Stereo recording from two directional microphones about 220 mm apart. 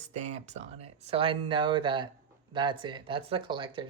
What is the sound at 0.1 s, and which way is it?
Speech, 30° right (ahead or behind).